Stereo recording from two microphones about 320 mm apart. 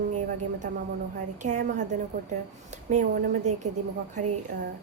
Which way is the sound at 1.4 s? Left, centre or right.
Right.